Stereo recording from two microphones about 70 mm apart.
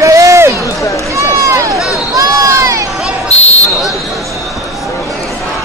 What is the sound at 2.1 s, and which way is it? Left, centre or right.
Crowd, right.